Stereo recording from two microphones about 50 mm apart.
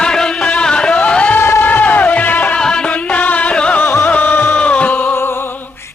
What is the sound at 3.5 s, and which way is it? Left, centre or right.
Music, centre.